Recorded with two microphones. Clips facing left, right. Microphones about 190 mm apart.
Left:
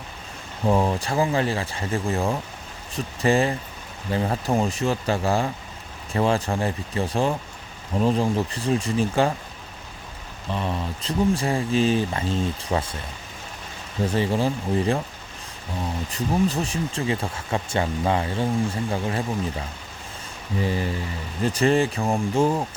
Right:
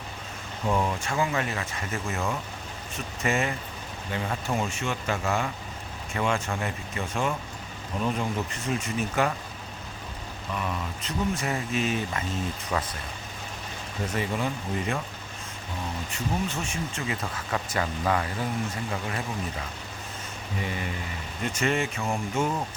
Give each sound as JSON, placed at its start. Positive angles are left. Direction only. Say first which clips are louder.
{"t": 0.6, "sound": "speech", "louder": "left 5 dB", "side_deg": 30}
{"t": 10.5, "sound": "speech", "louder": "left 5 dB", "side_deg": 30}
{"t": 14.1, "sound": "speech", "louder": "left 6 dB", "side_deg": 30}
{"t": 16.1, "sound": "speech", "louder": "left 8 dB", "side_deg": 35}